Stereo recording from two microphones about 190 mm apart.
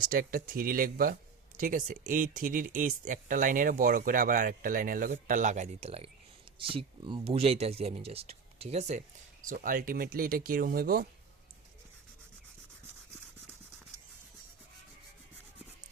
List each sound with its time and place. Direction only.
0.0 s speech: 45° right (ahead or behind)
9.5 s speech: 45° right (ahead or behind)